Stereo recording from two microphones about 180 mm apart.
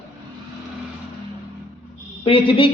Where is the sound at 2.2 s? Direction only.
30° left (ahead or behind).